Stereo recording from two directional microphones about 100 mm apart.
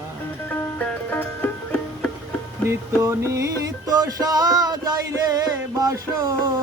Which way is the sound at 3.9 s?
40° right (ahead or behind).